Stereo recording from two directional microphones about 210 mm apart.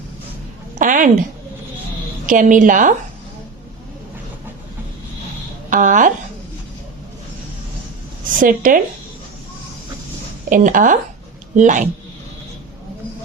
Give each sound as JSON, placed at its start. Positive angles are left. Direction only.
{"t": 0.8, "sound": "a sound", "side_deg": -40}
{"t": 2.2, "sound": "a woman's voice", "side_deg": -40}
{"t": 5.7, "sound": "a woman's voice", "side_deg": -40}
{"t": 8.4, "sound": "a woman's voice", "side_deg": -40}
{"t": 10.5, "sound": "a woman's voice", "side_deg": -40}